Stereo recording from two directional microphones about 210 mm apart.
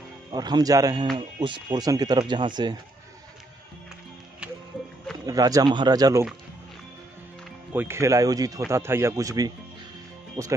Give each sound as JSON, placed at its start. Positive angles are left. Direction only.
{"t": 0.3, "sound": "speech", "side_deg": -20}
{"t": 5.2, "sound": "speech", "side_deg": -15}
{"t": 7.7, "sound": "speech", "side_deg": -10}